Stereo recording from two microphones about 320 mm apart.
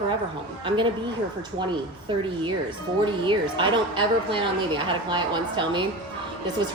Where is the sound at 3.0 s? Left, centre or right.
Centre.